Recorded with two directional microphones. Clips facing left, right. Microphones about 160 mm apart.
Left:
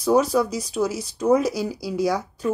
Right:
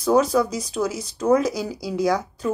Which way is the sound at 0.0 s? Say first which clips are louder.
Right 1 dB; 10° left (ahead or behind).